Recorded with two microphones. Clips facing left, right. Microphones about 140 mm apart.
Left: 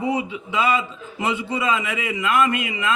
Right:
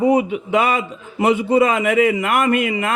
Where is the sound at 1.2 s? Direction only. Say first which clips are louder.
Right 8 dB; 50° right (ahead or behind).